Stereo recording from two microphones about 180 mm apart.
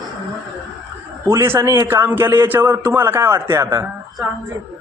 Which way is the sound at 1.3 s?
15° right (ahead or behind).